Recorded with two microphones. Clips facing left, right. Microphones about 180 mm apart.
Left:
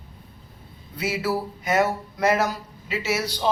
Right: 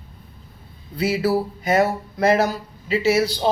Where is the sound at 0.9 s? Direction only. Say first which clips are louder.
Right 6 dB; 30° right (ahead or behind).